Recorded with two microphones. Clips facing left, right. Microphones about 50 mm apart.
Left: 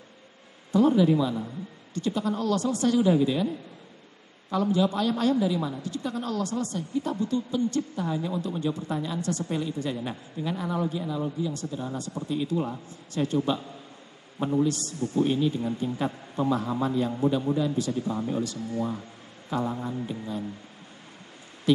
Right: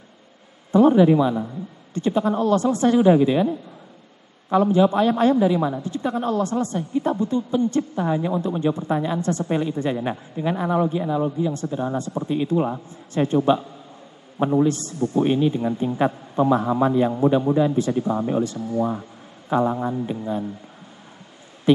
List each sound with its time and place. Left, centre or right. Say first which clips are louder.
0.7 s a woman's voice: right 6 dB; right
21.7 s a woman's voice: right 6 dB; right